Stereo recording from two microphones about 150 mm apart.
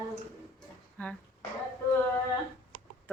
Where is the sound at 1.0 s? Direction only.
10° left (ahead or behind).